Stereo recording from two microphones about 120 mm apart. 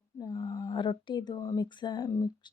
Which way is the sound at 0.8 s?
40° left (ahead or behind).